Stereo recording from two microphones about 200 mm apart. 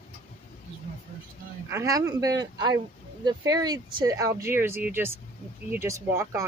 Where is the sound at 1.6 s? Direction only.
15° right (ahead or behind).